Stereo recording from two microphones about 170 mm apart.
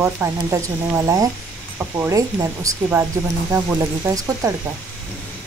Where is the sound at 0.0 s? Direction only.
15° right (ahead or behind).